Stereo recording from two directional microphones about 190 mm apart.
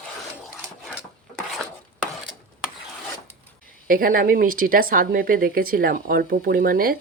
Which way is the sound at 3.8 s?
50° right (ahead or behind).